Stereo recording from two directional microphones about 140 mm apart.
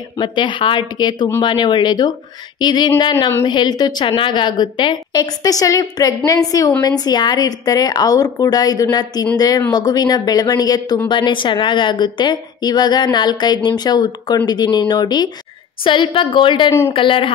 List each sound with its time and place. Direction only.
0.2 s a woman's voice: 35° left (ahead or behind)